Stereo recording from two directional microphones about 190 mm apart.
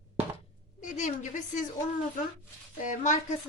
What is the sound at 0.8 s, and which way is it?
Speech, 40° left (ahead or behind).